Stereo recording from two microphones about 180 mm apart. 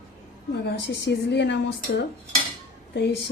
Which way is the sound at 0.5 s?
80° left.